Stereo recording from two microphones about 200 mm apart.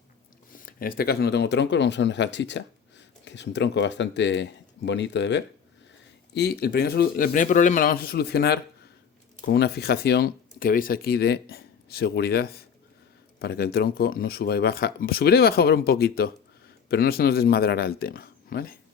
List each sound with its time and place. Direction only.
0.5 s speech: 45° left (ahead or behind)